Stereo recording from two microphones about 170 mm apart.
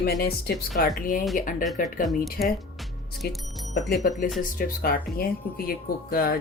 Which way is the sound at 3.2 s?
65° left (ahead or behind).